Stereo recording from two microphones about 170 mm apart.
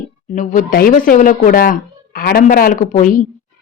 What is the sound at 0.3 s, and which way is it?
Speech, 55° left (ahead or behind).